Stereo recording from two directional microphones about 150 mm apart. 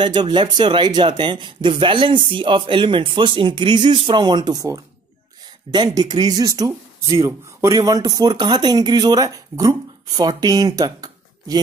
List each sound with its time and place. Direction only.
0.0 s speech: 30° right (ahead or behind)